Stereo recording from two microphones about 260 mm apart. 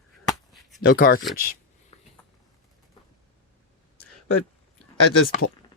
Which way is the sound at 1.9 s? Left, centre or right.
Left.